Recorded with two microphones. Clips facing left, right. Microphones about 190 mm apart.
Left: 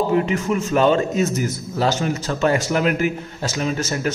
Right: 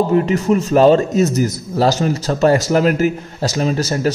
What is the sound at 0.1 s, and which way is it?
A man's voice, 40° right (ahead or behind).